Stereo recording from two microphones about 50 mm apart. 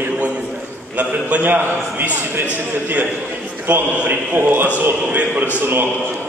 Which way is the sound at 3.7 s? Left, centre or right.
Right.